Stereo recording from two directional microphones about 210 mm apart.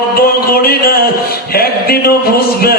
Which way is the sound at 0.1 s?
45° left (ahead or behind).